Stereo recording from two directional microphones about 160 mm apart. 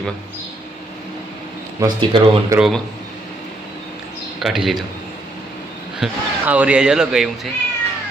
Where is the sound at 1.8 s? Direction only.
30° right (ahead or behind).